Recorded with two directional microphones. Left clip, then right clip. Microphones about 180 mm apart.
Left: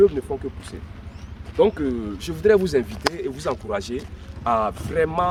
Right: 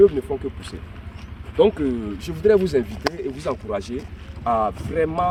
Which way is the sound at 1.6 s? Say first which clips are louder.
Right 1 dB; 65° right (ahead or behind).